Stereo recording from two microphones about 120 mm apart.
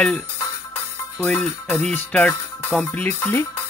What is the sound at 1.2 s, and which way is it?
Music, 10° left (ahead or behind).